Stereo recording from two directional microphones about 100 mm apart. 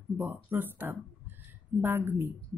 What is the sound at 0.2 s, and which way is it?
Speech, 20° right (ahead or behind).